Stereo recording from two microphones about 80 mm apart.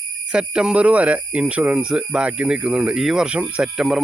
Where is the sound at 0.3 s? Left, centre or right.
Centre.